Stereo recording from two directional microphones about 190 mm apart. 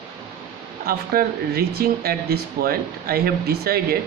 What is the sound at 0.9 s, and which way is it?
Speech, 50° right (ahead or behind).